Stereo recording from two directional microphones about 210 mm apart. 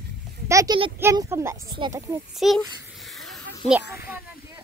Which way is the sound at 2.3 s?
Centre (ahead or behind).